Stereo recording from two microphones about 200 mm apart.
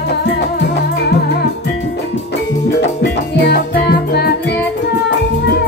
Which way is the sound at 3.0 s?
60° left (ahead or behind).